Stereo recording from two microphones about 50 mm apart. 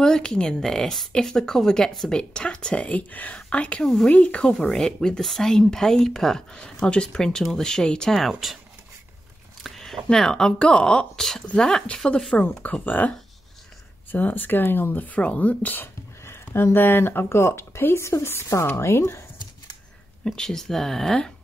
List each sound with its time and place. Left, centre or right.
0.0 s speech: centre
2.9 s speech: left
3.8 s speech: centre
4.1 s speech: left
4.5 s speech: centre
9.6 s a sound: centre
10.1 s speech: centre
11.1 s speech: centre
12.6 s speech: left
14.1 s speech: left
15.8 s a sound: left
17.3 s speech: left
18.8 s speech: left
20.2 s speech: centre